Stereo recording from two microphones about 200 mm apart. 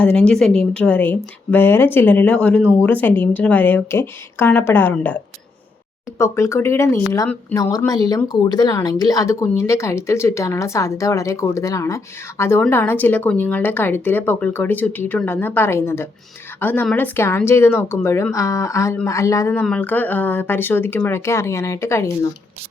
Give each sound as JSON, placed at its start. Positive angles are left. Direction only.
{"t": 0.0, "sound": "speech", "side_deg": 5}